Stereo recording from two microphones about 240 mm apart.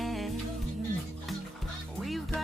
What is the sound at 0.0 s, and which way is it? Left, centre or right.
Music, centre.